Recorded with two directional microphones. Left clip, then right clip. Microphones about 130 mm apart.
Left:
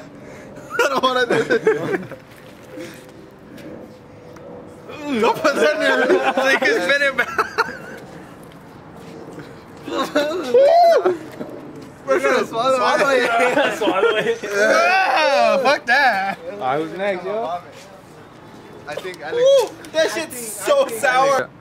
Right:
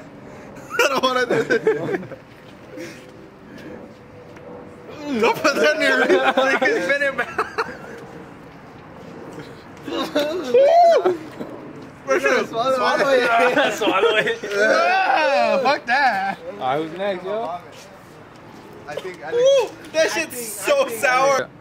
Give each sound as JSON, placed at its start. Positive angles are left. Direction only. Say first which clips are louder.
{"t": 0.7, "sound": "a sound", "louder": "left 1 dB", "side_deg": 0}
{"t": 1.4, "sound": "speech", "louder": "left 2 dB", "side_deg": 0}
{"t": 4.9, "sound": "speech", "louder": "left 1 dB", "side_deg": 5}
{"t": 6.1, "sound": "a man's voice", "louder": "right 1 dB", "side_deg": -30}
{"t": 6.4, "sound": "speech", "louder": "left 2 dB", "side_deg": 30}
{"t": 9.4, "sound": "a sound", "louder": "even", "side_deg": 10}
{"t": 11.0, "sound": "a sound", "louder": "left 1 dB", "side_deg": -5}
{"t": 12.1, "sound": "a man's voice", "louder": "left 1 dB", "side_deg": 5}
{"t": 13.6, "sound": "a man's voice", "louder": "even", "side_deg": -35}
{"t": 14.4, "sound": "a man's voice", "louder": "left 1 dB", "side_deg": 15}
{"t": 14.7, "sound": "speech", "louder": "left 2 dB", "side_deg": 30}
{"t": 16.5, "sound": "speech", "louder": "left 2 dB", "side_deg": 0}
{"t": 19.0, "sound": "speech", "louder": "right 1 dB", "side_deg": 35}
{"t": 19.4, "sound": "speech", "louder": "left 2 dB", "side_deg": 5}